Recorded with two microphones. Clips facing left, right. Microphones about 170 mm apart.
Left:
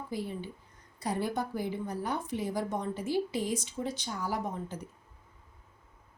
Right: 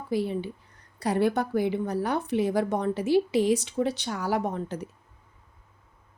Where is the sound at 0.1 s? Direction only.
80° right.